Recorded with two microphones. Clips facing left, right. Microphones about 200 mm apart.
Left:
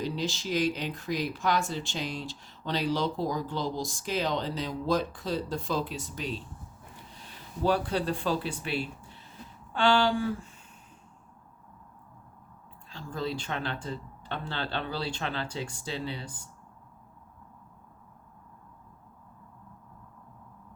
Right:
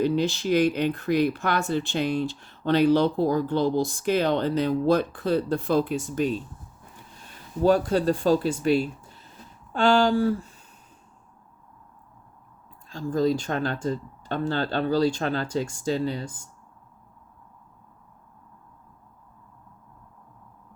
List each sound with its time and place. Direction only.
0.0 s speech: 60° right (ahead or behind)
7.6 s speech: 45° right (ahead or behind)
12.9 s speech: 45° right (ahead or behind)